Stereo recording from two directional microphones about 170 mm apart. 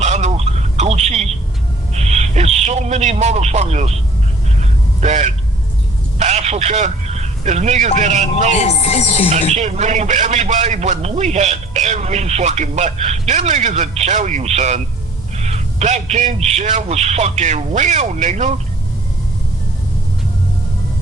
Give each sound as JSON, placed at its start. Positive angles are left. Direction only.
{"t": 0.0, "sound": "a sound", "side_deg": -40}
{"t": 4.6, "sound": "vehicle", "side_deg": -40}
{"t": 7.9, "sound": "speech", "side_deg": -45}
{"t": 8.5, "sound": "speech", "side_deg": 40}
{"t": 9.6, "sound": "a man's voice", "side_deg": -45}